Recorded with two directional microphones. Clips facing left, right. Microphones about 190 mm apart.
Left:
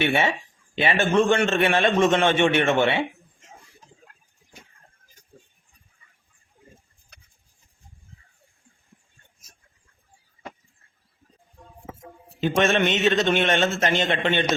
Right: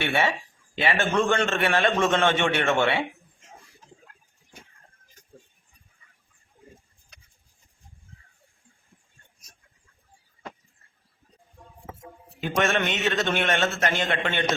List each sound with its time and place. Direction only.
0.0 s a man's voice: 15° left (ahead or behind)
12.4 s a man's voice: 20° left (ahead or behind)